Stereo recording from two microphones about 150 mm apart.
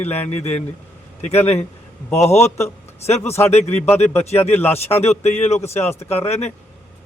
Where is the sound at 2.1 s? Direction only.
45° left (ahead or behind).